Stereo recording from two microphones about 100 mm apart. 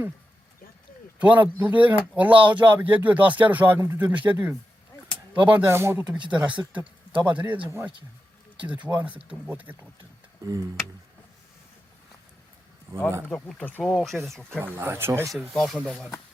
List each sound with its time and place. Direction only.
1.2 s speech: 15° right (ahead or behind)
6.3 s speech: 10° right (ahead or behind)
10.4 s tick: 35° right (ahead or behind)
13.3 s speech: 15° left (ahead or behind)
13.9 s speech: centre (ahead or behind)
14.6 s speech: 25° right (ahead or behind)
15.5 s speech: centre (ahead or behind)